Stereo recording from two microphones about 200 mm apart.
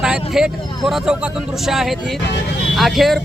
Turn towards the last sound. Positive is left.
turn(degrees=0)  # may be behind; listen again after turning